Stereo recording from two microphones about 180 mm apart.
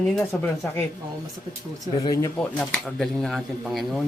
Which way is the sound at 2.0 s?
20° left (ahead or behind).